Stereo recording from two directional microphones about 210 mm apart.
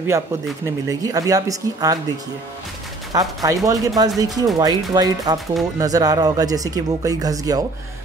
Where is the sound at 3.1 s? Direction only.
15° right (ahead or behind).